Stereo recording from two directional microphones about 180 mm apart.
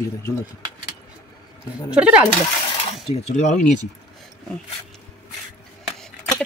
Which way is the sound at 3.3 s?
40° left (ahead or behind).